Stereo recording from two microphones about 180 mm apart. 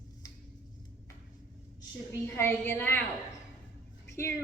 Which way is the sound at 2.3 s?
15° left (ahead or behind).